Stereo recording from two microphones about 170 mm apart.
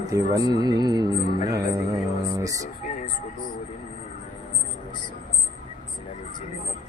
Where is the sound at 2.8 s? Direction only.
50° left (ahead or behind).